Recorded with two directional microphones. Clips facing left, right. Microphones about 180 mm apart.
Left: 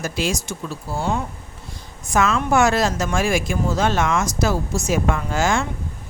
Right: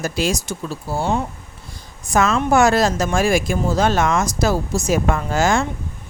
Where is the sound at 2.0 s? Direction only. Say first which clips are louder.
Right 2 dB; 40° right (ahead or behind).